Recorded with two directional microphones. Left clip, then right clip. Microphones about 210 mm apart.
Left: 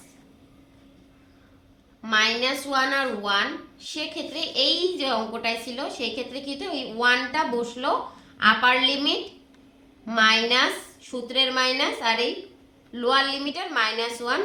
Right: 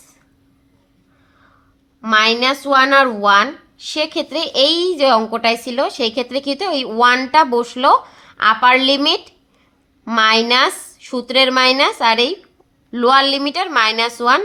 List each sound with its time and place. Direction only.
2.0 s a woman's voice: 40° right (ahead or behind)